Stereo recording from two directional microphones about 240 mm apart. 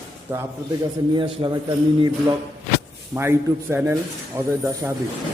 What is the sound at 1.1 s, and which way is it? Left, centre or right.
Speech, centre.